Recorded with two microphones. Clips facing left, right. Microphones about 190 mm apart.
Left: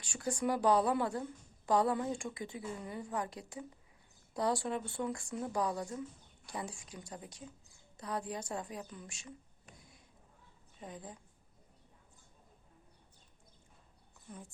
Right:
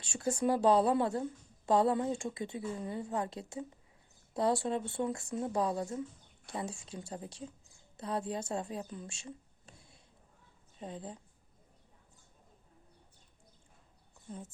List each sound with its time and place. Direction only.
0.0 s a woman's voice: 25° right (ahead or behind)
14.3 s speech: 25° right (ahead or behind)